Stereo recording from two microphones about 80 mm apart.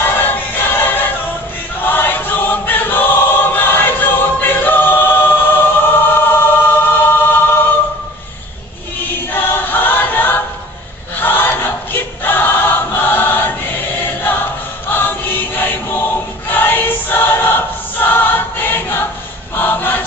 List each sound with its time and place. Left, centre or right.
0.0 s music: left
1.8 s choir: left
9.3 s choir: left